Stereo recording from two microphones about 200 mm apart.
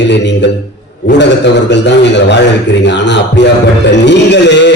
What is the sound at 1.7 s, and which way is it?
A man's voice, 60° left (ahead or behind).